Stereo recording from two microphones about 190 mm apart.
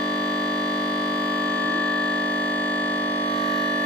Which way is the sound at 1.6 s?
5° left (ahead or behind).